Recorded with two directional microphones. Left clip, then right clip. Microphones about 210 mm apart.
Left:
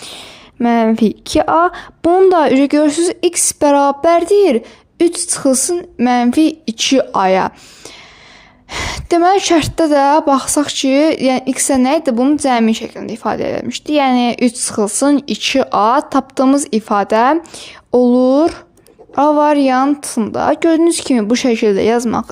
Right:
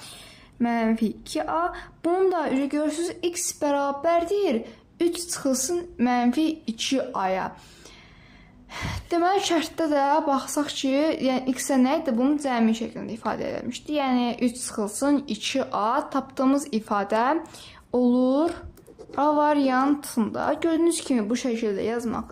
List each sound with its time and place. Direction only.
0.1 s a woman's voice: 45° left (ahead or behind)
8.7 s a woman's voice: 45° left (ahead or behind)